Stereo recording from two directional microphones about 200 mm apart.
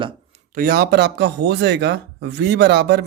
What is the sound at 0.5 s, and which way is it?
Speech, 50° right (ahead or behind).